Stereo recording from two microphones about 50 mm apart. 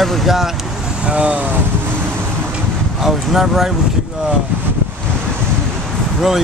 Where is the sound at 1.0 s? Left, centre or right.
Right.